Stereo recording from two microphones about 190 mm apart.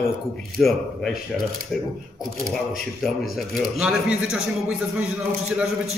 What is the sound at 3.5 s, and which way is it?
A man's voice, 5° right (ahead or behind).